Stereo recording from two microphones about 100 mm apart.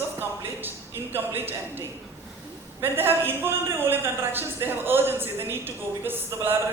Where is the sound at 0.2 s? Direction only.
20° right (ahead or behind).